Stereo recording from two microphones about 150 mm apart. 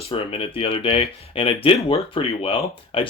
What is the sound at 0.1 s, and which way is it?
Speech, 40° left (ahead or behind).